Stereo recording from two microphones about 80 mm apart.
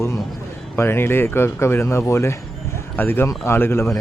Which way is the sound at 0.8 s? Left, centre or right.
Left.